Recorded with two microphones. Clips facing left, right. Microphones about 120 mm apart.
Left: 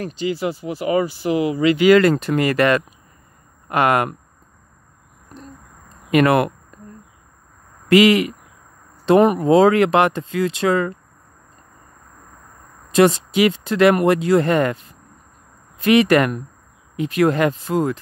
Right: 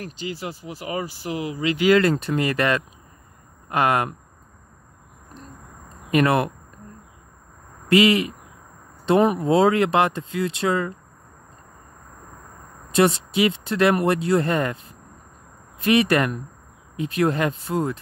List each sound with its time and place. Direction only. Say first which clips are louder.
0.3 s speech: left 11 dB; 70° left (ahead or behind)
6.1 s speech: left 4 dB; 80° left
7.9 s speech: left 4 dB; 75° left (ahead or behind)
12.9 s speech: left 4 dB; 90° left
15.8 s speech: left 4 dB; 90° left